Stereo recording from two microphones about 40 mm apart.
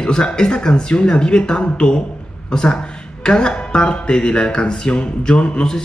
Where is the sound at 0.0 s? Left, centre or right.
Centre.